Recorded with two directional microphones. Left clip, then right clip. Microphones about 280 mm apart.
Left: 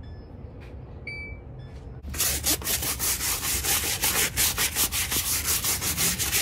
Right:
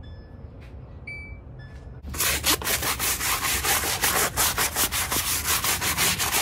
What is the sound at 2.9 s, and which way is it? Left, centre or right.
Sanding, centre.